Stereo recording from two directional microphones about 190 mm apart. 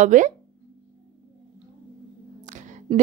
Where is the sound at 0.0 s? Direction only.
40° right (ahead or behind).